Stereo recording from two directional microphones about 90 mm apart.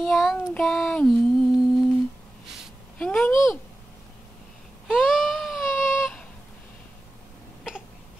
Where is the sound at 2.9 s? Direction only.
15° left (ahead or behind).